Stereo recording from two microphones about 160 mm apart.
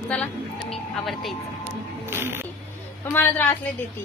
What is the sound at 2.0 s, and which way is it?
Music, 15° right (ahead or behind).